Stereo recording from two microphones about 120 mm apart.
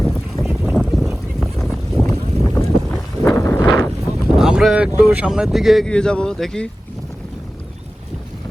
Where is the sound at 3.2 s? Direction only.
20° left (ahead or behind).